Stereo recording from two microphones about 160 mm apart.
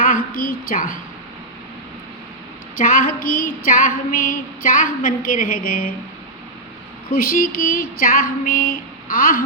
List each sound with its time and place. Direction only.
0.0 s a woman's voice: 60° left (ahead or behind)
2.7 s female singing: 60° left (ahead or behind)
7.1 s female singing: 65° left (ahead or behind)